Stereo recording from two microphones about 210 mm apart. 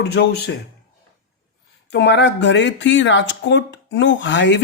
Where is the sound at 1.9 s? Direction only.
55° left (ahead or behind).